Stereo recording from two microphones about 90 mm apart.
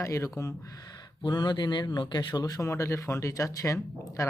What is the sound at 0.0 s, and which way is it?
Speech, 35° left (ahead or behind).